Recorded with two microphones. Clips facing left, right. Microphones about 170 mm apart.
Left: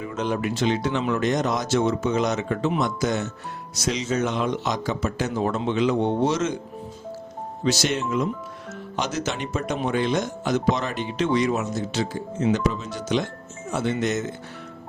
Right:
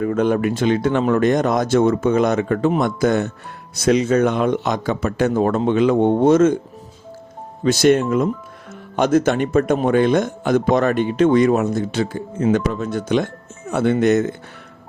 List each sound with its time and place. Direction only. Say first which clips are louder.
0.0 s speech: right 8 dB; 55° right (ahead or behind)
7.6 s speech: right 9 dB; 55° right (ahead or behind)